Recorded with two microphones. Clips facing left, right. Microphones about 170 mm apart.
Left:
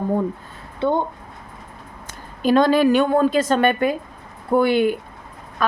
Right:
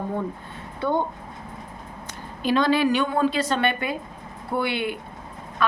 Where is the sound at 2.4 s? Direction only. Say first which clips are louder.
Left 5 dB; 45° left (ahead or behind).